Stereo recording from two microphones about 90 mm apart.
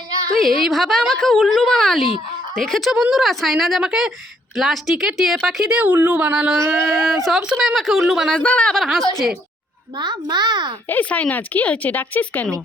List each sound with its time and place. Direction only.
0.3 s a woman's voice: centre (ahead or behind)
6.1 s a sound: 15° right (ahead or behind)
6.6 s speech: 30° right (ahead or behind)
7.3 s a woman's voice: centre (ahead or behind)
8.3 s speech: 15° left (ahead or behind)
8.7 s a woman's voice: centre (ahead or behind)
10.0 s a child's voice: 50° right (ahead or behind)
10.8 s speech: 20° left (ahead or behind)